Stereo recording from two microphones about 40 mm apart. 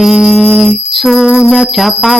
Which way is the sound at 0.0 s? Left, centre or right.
Centre.